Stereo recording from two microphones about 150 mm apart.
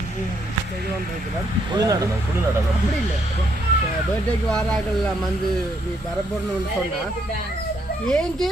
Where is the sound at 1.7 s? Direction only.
25° right (ahead or behind).